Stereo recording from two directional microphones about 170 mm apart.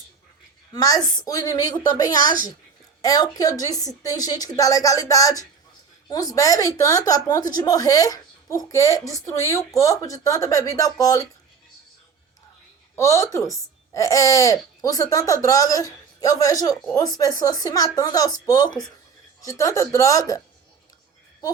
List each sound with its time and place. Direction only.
0.7 s a woman's voice: 20° left (ahead or behind)
13.0 s a woman's voice: 20° left (ahead or behind)